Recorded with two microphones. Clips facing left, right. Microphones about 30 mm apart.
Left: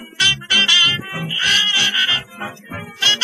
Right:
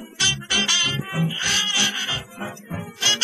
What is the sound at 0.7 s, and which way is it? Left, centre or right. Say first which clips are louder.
Music: left 10 dB; left.